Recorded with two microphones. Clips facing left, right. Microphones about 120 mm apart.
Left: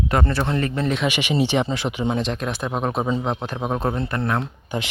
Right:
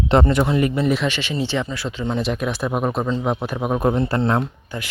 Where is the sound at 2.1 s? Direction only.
5° right (ahead or behind); by 4.4 s 25° right (ahead or behind).